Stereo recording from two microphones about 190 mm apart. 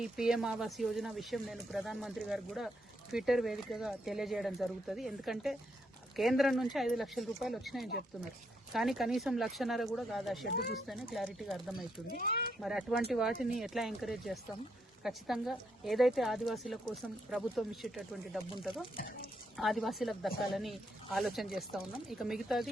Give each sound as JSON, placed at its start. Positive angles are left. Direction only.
{"t": 0.0, "sound": "speech", "side_deg": -5}
{"t": 12.1, "sound": "speech", "side_deg": 50}
{"t": 12.6, "sound": "speech", "side_deg": 0}
{"t": 13.3, "sound": "speech", "side_deg": 45}
{"t": 13.6, "sound": "speech", "side_deg": 0}